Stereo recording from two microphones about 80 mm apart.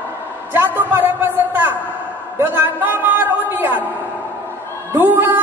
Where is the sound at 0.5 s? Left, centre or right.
Right.